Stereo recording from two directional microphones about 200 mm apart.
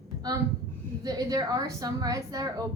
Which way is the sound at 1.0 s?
20° right (ahead or behind).